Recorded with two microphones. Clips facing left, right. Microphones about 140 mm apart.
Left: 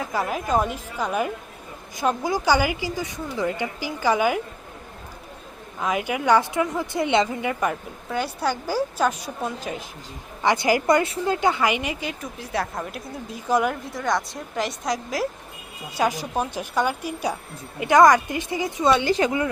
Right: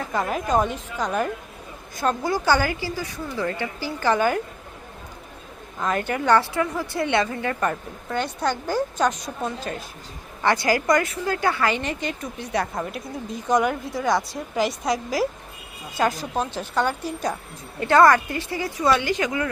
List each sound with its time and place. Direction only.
0.1 s speech: 5° left (ahead or behind)
5.8 s speech: 10° left (ahead or behind)
16.0 s speech: 10° left (ahead or behind); by 19.5 s 30° left (ahead or behind)